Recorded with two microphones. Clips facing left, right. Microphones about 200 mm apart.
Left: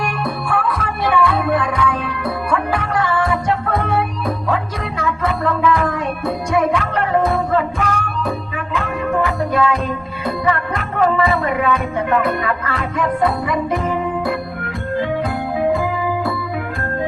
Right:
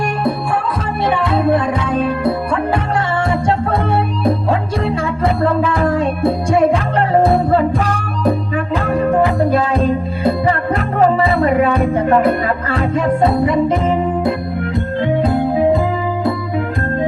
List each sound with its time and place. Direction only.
0.3 s music: 25° right (ahead or behind)